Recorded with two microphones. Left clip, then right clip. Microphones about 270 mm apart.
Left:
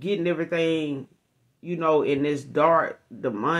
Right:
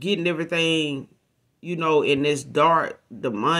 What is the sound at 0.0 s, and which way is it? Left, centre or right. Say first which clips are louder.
Speech: right 1 dB; right.